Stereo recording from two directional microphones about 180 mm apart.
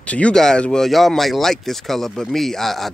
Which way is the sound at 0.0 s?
5° left (ahead or behind).